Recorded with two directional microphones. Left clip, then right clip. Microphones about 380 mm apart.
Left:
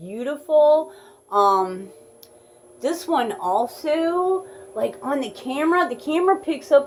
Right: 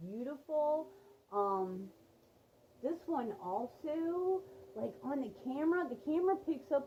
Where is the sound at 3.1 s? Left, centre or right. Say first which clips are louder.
Left 18 dB; centre.